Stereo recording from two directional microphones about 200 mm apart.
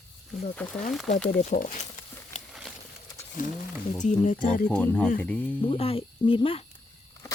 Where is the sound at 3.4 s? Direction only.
40° left (ahead or behind).